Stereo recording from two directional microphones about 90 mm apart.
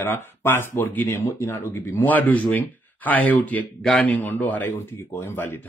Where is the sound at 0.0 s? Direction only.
20° left (ahead or behind).